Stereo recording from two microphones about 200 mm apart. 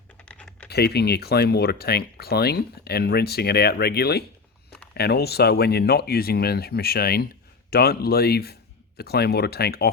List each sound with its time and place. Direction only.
0.3 s typing: 5° left (ahead or behind)
0.7 s speech: 55° left (ahead or behind)